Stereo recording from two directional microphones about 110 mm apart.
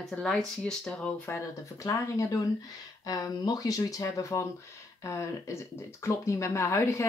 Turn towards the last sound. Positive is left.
turn(degrees=25)  # may be behind; listen again after turning